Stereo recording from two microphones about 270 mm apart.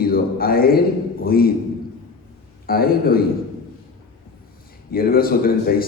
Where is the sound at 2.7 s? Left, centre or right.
Left.